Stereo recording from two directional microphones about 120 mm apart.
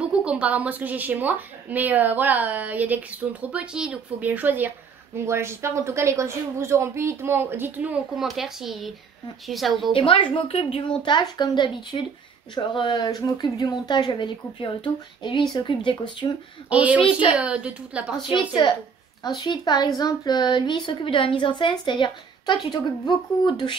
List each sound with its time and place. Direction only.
0.1 s a woman's voice: 10° right (ahead or behind)
8.2 s speech: 5° right (ahead or behind)
9.9 s speech: 45° left (ahead or behind)
11.0 s a woman's voice: 40° left (ahead or behind)
16.6 s a woman's voice: 10° right (ahead or behind)
18.3 s a woman's voice: 40° left (ahead or behind)